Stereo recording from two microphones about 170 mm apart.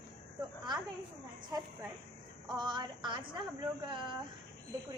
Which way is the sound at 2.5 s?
25° right (ahead or behind).